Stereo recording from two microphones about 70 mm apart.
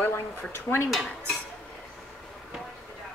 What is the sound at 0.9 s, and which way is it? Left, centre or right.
Dishes, centre.